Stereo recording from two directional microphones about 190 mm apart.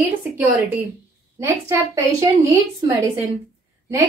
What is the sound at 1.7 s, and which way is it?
Speech, 15° right (ahead or behind).